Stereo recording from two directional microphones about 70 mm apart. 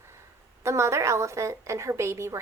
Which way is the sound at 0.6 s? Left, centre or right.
Right.